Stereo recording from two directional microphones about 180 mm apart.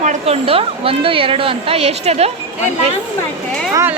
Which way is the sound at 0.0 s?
40° right (ahead or behind).